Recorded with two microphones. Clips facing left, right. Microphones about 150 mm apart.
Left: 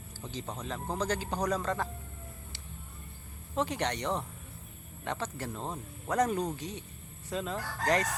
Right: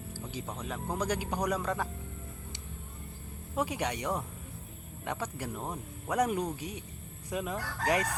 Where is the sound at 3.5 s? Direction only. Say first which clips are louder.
Left 1 dB; 10° right (ahead or behind).